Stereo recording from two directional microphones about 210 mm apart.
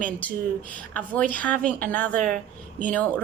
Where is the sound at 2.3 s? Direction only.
40° right (ahead or behind).